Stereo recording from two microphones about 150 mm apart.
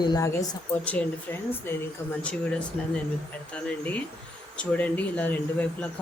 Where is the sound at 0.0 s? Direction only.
25° left (ahead or behind).